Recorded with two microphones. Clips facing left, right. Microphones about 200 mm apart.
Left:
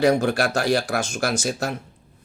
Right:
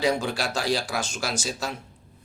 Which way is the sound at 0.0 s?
60° left (ahead or behind).